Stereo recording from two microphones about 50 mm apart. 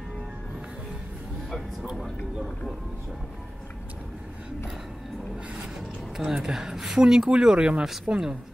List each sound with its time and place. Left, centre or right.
5.8 s speech: centre
8.1 s speech: right